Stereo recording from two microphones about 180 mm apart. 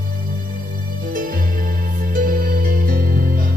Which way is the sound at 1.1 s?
50° right (ahead or behind).